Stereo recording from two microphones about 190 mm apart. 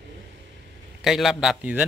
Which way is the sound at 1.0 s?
Centre (ahead or behind).